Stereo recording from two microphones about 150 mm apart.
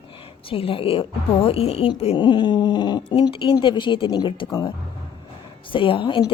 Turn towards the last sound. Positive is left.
turn(degrees=35)  # may be behind; listen again after turning